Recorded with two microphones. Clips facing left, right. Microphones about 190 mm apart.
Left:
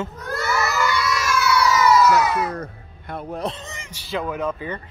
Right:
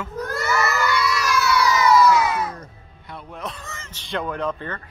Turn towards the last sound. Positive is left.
turn(degrees=5)  # may be behind; listen again after turning